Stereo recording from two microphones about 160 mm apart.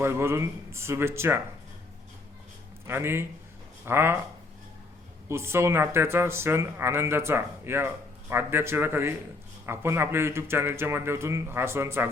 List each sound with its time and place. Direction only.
0.0 s speech: 15° right (ahead or behind)
2.8 s speech: 15° right (ahead or behind)
5.3 s speech: 15° right (ahead or behind)